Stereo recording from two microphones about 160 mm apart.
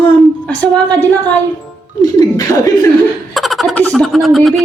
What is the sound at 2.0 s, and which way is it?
Speech, 25° left (ahead or behind).